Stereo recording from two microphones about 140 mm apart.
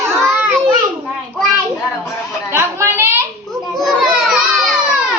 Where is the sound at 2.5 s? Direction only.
20° right (ahead or behind).